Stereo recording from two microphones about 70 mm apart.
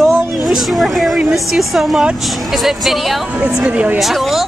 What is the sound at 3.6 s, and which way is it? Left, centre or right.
Speech, centre.